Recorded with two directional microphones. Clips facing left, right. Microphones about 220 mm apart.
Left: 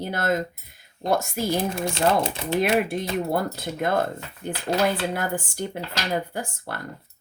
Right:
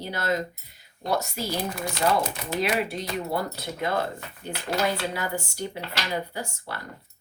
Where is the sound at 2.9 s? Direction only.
50° left (ahead or behind).